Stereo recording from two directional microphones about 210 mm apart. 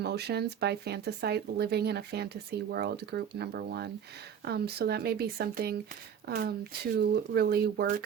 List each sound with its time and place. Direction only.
0.0 s speech: 50° right (ahead or behind)